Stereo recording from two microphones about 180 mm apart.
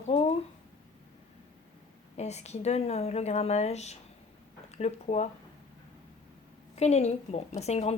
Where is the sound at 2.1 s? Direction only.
40° left (ahead or behind).